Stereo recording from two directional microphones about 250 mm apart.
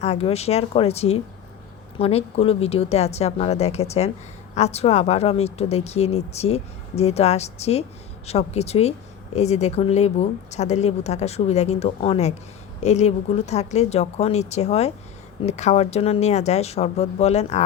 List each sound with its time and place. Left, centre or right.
0.0 s speech: left